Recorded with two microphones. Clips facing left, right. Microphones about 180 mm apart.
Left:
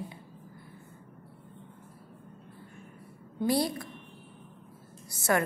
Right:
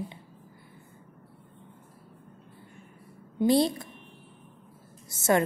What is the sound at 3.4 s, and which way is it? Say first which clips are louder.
Speech: right 5 dB; 25° right (ahead or behind).